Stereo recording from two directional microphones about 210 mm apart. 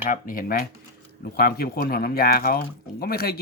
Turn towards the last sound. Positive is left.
turn(degrees=45)  # may be behind; listen again after turning